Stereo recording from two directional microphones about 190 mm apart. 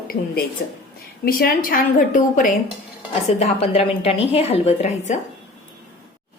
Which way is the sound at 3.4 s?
30° left (ahead or behind).